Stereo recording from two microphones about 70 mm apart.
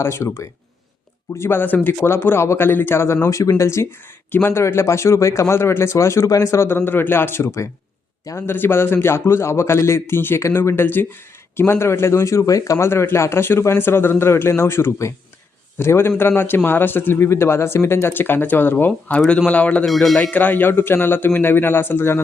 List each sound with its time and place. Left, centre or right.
0.0 s a man's voice: left
3.2 s a man's voice: left
6.7 s a man's voice: left
19.8 s speech: centre
20.3 s a man's voice: left